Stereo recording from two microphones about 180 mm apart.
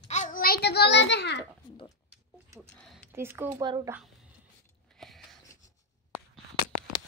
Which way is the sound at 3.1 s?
15° right (ahead or behind).